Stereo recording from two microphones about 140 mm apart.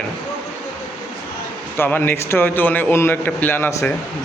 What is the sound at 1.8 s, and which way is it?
A man's voice, 15° left (ahead or behind).